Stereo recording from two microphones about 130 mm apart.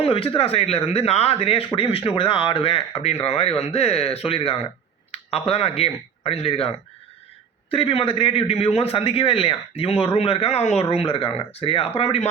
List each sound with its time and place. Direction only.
0.0 s speech: 45° left (ahead or behind)